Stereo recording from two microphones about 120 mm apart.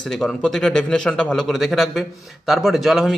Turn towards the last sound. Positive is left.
turn(degrees=0)  # may be behind; listen again after turning